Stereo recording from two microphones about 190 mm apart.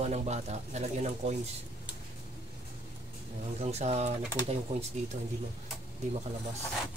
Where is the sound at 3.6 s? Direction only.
35° right (ahead or behind).